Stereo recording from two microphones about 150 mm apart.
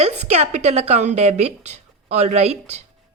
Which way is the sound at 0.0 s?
45° right (ahead or behind).